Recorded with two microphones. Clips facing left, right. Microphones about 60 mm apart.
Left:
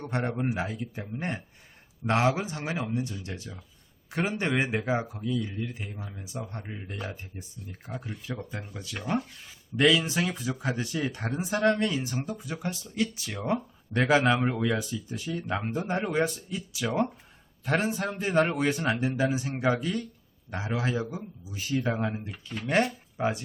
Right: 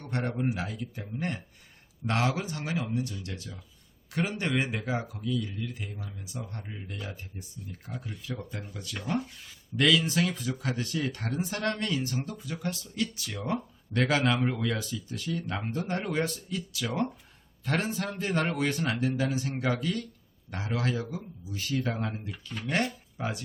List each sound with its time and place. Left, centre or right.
0.3 s a man's voice: left